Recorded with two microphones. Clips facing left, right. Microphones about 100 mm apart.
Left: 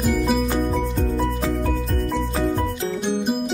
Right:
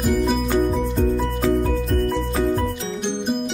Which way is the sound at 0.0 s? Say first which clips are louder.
Even; centre (ahead or behind).